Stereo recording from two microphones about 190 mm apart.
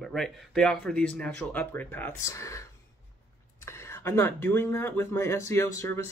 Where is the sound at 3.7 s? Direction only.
15° left (ahead or behind).